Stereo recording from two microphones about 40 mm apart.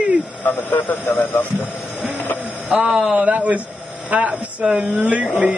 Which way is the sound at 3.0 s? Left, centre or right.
Right.